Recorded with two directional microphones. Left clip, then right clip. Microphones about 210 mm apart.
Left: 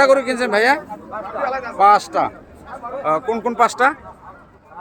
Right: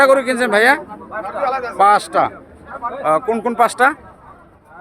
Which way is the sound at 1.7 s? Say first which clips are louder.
Even; 20° right (ahead or behind).